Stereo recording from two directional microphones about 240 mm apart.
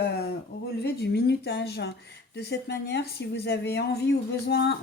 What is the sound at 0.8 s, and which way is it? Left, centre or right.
Speech, left.